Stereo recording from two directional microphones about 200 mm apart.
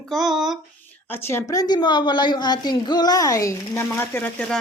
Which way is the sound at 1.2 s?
15° left (ahead or behind).